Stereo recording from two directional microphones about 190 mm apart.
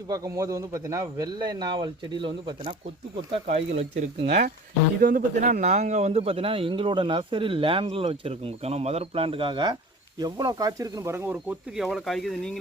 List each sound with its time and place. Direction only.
0.1 s a man's voice: 15° right (ahead or behind)
3.3 s a man's voice: 35° right (ahead or behind); by 12.5 s centre (ahead or behind)